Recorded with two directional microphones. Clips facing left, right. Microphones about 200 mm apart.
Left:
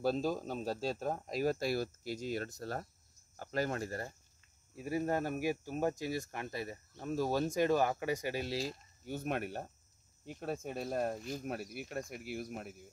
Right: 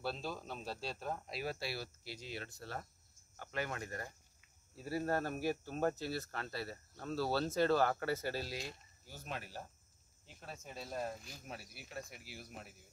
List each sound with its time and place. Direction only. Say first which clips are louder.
0.0 s speech: left 9 dB; 40° left (ahead or behind)
4.7 s speech: left 3 dB; 15° left (ahead or behind)
8.5 s speech: left 7 dB; 30° left (ahead or behind)
9.0 s speech: left 10 dB; 60° left (ahead or behind)